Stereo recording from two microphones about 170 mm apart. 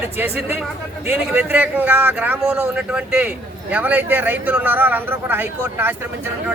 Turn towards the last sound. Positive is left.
turn(degrees=-10)  # may be behind; listen again after turning